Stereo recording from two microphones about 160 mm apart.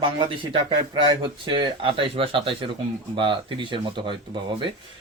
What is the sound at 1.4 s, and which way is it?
Speech, 30° right (ahead or behind).